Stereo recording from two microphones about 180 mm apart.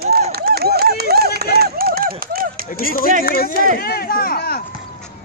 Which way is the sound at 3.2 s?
55° left (ahead or behind).